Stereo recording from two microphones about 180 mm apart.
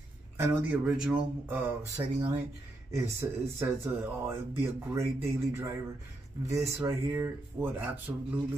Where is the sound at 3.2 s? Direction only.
15° right (ahead or behind).